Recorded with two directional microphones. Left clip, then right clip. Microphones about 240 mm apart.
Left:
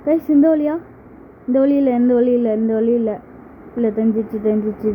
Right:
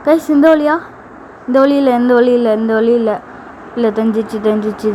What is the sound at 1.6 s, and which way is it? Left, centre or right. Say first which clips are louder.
A woman's voice: right 4 dB; right.